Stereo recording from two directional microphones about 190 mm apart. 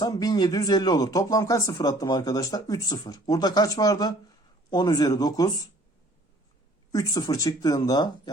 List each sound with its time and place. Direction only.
0.0 s speech: 20° left (ahead or behind)
6.9 s speech: 20° left (ahead or behind)